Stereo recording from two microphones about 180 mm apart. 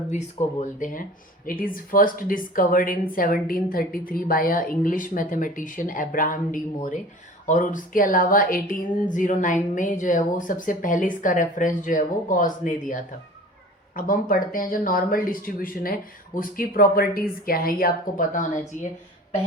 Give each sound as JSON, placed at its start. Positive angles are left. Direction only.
{"t": 0.1, "sound": "speech", "side_deg": 40}